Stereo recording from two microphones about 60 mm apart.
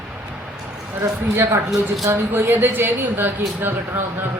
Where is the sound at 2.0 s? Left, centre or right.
Right.